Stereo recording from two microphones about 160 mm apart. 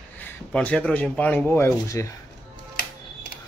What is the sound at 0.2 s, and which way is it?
Speech, 5° left (ahead or behind).